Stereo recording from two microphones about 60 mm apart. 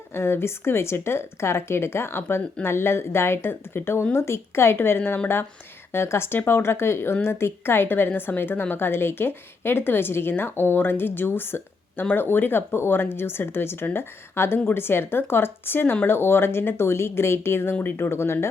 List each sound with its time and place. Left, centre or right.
0.1 s speech: left